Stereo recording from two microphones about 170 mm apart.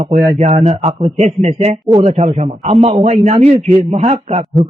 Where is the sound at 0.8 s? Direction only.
35° right (ahead or behind).